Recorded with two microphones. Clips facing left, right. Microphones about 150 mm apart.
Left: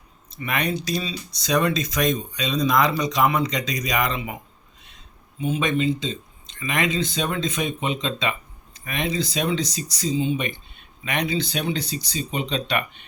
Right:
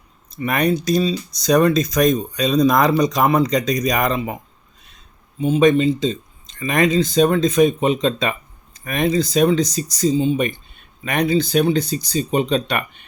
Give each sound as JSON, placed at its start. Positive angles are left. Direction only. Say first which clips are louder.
{"t": 0.3, "sound": "speech", "louder": "right 7 dB", "side_deg": -45}
{"t": 5.4, "sound": "speech", "louder": "right 8 dB", "side_deg": -35}